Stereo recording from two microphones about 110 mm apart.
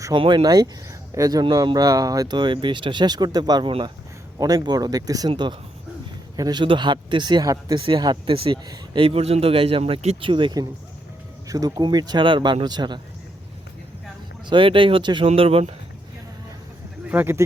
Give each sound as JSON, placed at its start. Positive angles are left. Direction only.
{"t": 0.1, "sound": "speech", "side_deg": -50}
{"t": 3.7, "sound": "speech", "side_deg": -50}
{"t": 4.4, "sound": "speech", "side_deg": -35}
{"t": 5.3, "sound": "speech", "side_deg": -45}
{"t": 7.8, "sound": "speech", "side_deg": -50}
{"t": 8.6, "sound": "speech", "side_deg": -35}
{"t": 9.0, "sound": "speech", "side_deg": -60}
{"t": 10.2, "sound": "speech", "side_deg": -50}
{"t": 11.4, "sound": "speech", "side_deg": -35}
{"t": 14.5, "sound": "speech", "side_deg": -50}
{"t": 15.3, "sound": "speech", "side_deg": -60}
{"t": 17.1, "sound": "speech", "side_deg": -20}